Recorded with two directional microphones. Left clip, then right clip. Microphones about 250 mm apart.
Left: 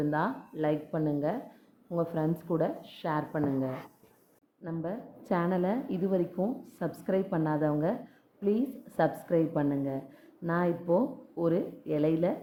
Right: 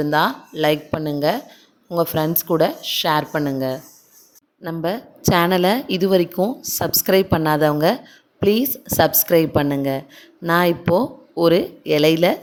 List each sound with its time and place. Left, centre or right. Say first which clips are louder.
0.0 s speech: right 12 dB; right